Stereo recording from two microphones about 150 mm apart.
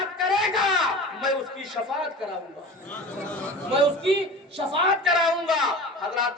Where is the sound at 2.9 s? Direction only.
5° left (ahead or behind).